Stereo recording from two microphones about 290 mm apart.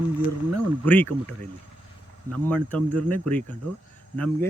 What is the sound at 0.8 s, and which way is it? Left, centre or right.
Speech, centre.